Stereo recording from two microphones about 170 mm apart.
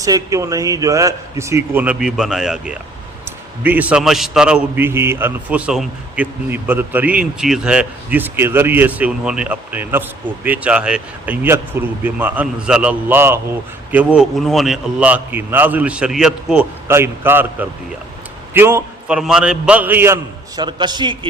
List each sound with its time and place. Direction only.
0.0 s a man's voice: 20° right (ahead or behind)
20.6 s a man's voice: 25° right (ahead or behind)